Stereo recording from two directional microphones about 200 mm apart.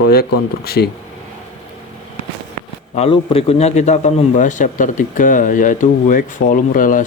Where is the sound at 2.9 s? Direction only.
30° left (ahead or behind).